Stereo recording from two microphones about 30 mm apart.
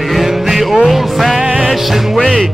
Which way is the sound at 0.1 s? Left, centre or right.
Centre.